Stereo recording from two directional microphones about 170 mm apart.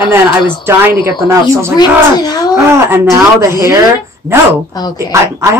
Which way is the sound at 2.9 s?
15° right (ahead or behind).